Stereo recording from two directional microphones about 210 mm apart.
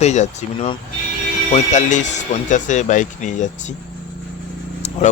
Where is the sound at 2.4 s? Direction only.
35° left (ahead or behind).